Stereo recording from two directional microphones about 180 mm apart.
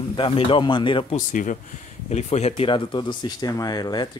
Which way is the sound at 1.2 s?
45° left (ahead or behind).